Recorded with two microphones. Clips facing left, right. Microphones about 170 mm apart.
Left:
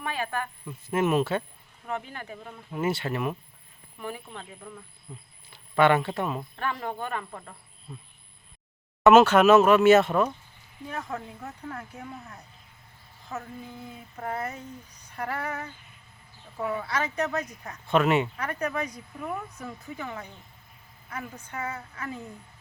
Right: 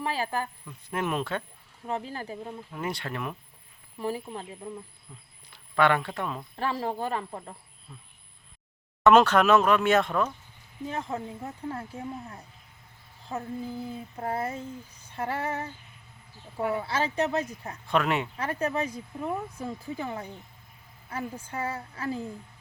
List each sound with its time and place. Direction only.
0.0 s a woman's voice: 30° right (ahead or behind)
0.9 s speech: 5° left (ahead or behind)
1.9 s a woman's voice: 30° right (ahead or behind)
2.7 s speech: 5° left (ahead or behind)
3.9 s speech: 30° right (ahead or behind)
5.1 s speech: 10° left (ahead or behind)
6.6 s a woman's voice: 30° right (ahead or behind)
7.9 s speech: 15° left (ahead or behind)
9.0 s speech: 5° left (ahead or behind)
10.8 s speech: 25° right (ahead or behind)
16.7 s speech: 30° right (ahead or behind)
17.8 s speech: centre (ahead or behind)
18.3 s a woman's voice: 30° right (ahead or behind)